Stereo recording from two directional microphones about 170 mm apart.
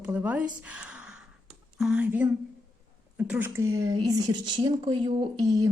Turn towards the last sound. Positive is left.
turn(degrees=-20)  # may be behind; listen again after turning